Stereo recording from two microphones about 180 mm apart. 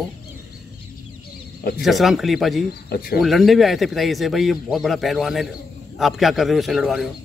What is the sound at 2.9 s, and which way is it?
Speech, 60° left (ahead or behind).